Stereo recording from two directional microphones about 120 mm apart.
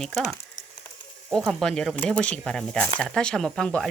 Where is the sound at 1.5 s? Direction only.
5° left (ahead or behind).